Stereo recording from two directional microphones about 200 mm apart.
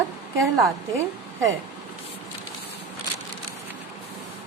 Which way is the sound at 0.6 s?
15° right (ahead or behind).